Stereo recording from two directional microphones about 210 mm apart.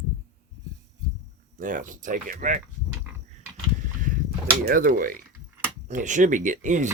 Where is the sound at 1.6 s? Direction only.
40° right (ahead or behind).